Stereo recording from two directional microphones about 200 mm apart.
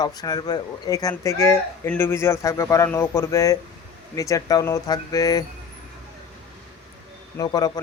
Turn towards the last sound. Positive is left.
turn(degrees=20)  # may be behind; listen again after turning